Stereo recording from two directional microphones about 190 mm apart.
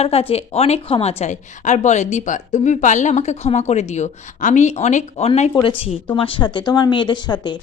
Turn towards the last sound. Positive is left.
turn(degrees=25)  # may be behind; listen again after turning